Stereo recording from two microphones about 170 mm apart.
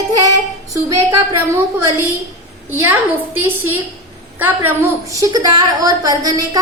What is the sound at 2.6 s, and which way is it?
A woman's voice, 10° right (ahead or behind).